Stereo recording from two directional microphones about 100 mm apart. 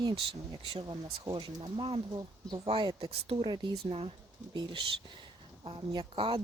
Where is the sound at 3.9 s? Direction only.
70° right (ahead or behind).